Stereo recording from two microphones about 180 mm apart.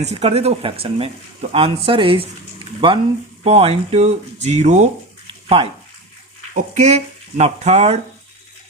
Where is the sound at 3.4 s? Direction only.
35° right (ahead or behind).